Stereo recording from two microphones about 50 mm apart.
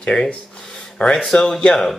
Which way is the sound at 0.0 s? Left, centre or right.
Centre.